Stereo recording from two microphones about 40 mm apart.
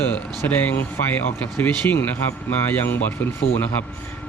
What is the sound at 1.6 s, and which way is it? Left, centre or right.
Speech, left.